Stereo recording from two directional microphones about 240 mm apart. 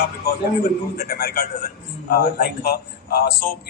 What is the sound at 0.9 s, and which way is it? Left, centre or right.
A man's voice, left.